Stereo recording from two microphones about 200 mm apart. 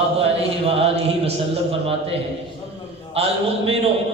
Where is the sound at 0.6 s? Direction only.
30° right (ahead or behind).